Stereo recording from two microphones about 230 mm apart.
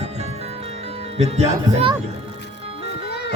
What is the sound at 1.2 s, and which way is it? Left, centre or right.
Speech, right.